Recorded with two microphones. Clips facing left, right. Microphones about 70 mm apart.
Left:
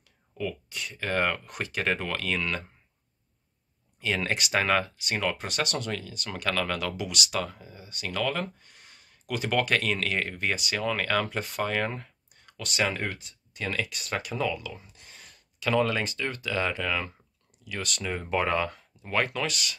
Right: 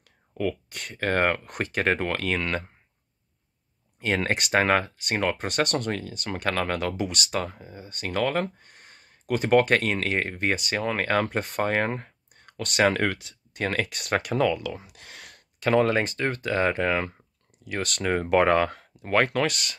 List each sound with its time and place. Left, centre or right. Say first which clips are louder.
0.3 s speech: right 5 dB; right
4.0 s speech: right 3 dB; right
15.6 s speech: right 4 dB; right